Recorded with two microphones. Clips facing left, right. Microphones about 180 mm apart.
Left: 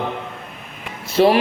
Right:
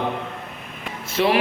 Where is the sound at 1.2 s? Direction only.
40° left (ahead or behind).